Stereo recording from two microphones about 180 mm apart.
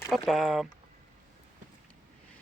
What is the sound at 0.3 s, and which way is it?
Speech, centre (ahead or behind).